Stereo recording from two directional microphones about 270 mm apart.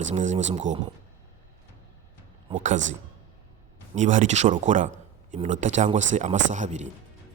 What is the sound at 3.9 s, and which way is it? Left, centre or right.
Speech, right.